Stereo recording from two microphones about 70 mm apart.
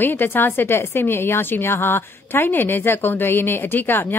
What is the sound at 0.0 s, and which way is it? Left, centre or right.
A woman's voice, left.